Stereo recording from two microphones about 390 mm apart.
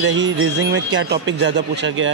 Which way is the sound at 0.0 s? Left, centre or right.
Right.